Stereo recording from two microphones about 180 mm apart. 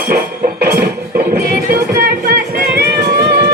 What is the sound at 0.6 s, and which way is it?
Music, 60° right (ahead or behind).